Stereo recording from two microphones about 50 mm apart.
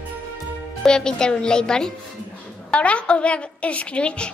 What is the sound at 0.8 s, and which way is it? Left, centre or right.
A woman's voice, centre.